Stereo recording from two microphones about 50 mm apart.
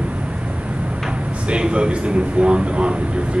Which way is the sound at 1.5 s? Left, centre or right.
Right.